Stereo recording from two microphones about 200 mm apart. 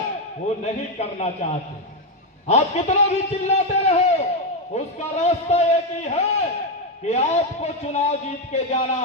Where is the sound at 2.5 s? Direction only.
35° left (ahead or behind).